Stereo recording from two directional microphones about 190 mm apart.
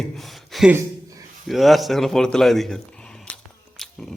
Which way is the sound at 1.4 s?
Centre (ahead or behind).